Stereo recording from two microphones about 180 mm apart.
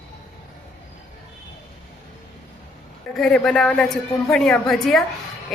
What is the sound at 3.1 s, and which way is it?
A woman's voice, centre (ahead or behind).